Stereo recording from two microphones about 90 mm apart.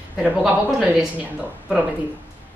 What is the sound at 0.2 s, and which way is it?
A woman's voice, 5° right (ahead or behind).